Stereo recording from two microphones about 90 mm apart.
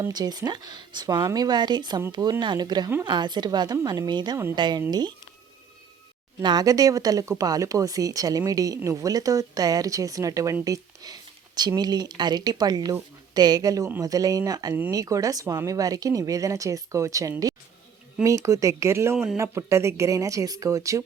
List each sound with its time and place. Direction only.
0.1 s a woman's voice: 50° right (ahead or behind)
6.4 s speech: 50° right (ahead or behind)